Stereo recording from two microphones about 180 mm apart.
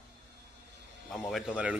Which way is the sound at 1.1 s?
Centre (ahead or behind).